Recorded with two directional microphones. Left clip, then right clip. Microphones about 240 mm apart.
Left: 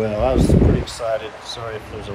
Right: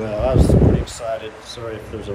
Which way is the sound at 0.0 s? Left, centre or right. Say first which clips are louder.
Left 1 dB; left.